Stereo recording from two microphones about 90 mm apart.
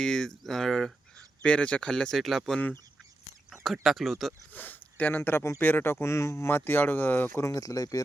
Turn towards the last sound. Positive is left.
turn(degrees=40)  # may be behind; listen again after turning